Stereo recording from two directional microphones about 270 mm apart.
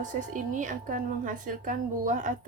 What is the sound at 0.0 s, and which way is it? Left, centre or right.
A woman's voice, right.